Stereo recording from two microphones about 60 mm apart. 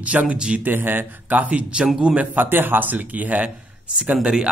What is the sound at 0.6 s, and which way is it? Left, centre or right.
A man's voice, right.